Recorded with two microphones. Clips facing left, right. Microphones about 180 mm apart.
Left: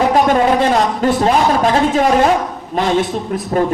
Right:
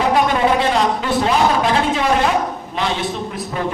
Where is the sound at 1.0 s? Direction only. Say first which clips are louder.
Left 6 dB; 45° left (ahead or behind).